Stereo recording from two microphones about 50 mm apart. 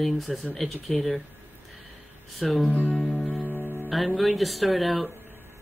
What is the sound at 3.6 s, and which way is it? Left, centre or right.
Music, left.